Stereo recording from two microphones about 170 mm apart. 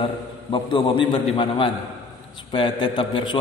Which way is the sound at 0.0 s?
30° left (ahead or behind).